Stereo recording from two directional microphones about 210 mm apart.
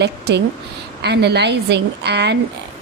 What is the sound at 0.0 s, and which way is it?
A woman's voice, 50° right (ahead or behind).